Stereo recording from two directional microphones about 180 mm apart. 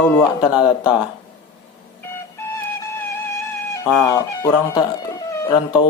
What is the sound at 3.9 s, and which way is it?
Speech, 20° left (ahead or behind).